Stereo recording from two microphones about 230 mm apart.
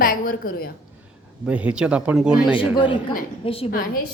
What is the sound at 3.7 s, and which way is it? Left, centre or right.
Speech, left.